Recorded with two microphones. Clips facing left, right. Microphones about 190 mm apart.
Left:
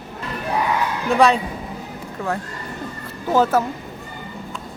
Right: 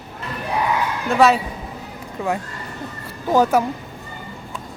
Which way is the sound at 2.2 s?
15° right (ahead or behind).